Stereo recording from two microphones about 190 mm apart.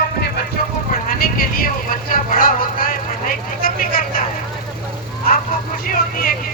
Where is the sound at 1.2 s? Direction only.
50° left (ahead or behind).